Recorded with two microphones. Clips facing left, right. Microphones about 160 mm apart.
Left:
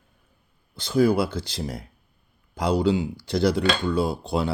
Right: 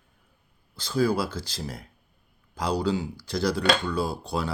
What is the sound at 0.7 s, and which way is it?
Speech, 25° left (ahead or behind).